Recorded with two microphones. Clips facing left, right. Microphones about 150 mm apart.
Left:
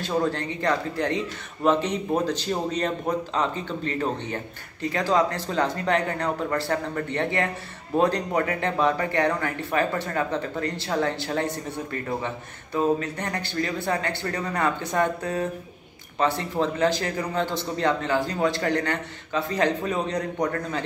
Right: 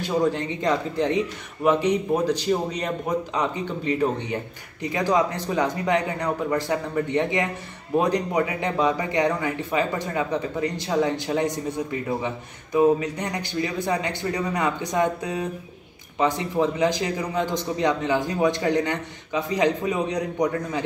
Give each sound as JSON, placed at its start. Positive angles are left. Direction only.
{"t": 0.0, "sound": "a man's voice", "side_deg": -15}